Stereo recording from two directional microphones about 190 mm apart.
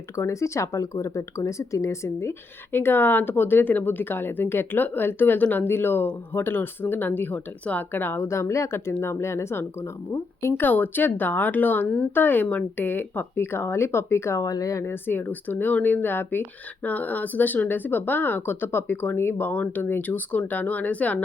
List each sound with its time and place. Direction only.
0.2 s speech: 15° left (ahead or behind)